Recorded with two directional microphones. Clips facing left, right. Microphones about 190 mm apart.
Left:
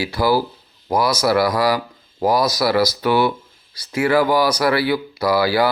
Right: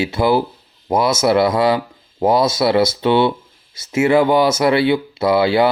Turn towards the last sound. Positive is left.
turn(degrees=-25)  # may be behind; listen again after turning